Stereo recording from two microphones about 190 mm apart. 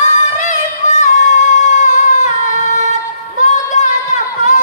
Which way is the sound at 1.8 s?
40° left (ahead or behind).